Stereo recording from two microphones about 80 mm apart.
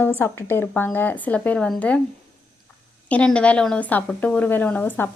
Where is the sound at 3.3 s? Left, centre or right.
Centre.